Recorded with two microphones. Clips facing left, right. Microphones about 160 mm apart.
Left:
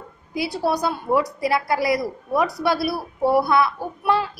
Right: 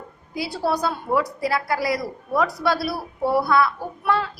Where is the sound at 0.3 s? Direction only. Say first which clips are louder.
Left 1 dB; 20° left (ahead or behind).